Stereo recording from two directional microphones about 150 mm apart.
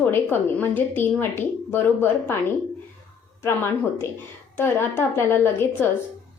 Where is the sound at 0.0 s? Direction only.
15° left (ahead or behind).